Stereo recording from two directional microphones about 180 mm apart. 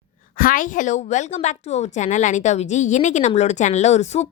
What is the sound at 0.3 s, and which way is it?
Speech, 50° left (ahead or behind).